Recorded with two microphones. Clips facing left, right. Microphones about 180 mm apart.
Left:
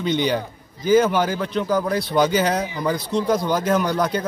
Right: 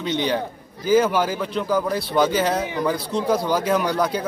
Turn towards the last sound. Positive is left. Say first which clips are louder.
# left 1 dB
turn(degrees=-5)  # may be behind; listen again after turning